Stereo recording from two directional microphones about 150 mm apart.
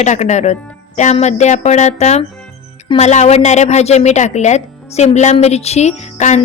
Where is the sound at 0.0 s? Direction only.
50° left (ahead or behind).